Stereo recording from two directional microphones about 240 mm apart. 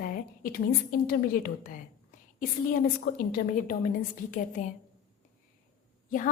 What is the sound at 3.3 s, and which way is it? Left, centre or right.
Speech, left.